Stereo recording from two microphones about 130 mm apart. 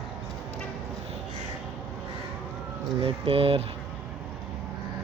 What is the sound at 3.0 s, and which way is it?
Speech, 45° right (ahead or behind).